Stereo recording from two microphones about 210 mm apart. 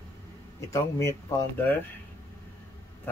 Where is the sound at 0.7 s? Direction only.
15° left (ahead or behind).